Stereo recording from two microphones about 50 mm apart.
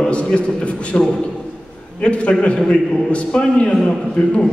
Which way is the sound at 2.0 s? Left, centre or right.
Left.